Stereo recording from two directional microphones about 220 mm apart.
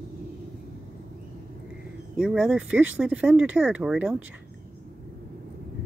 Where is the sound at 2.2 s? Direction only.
5° right (ahead or behind).